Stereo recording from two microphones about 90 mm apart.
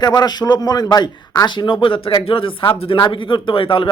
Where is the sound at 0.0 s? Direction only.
50° left (ahead or behind).